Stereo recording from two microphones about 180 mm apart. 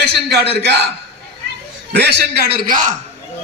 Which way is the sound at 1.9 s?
65° right (ahead or behind).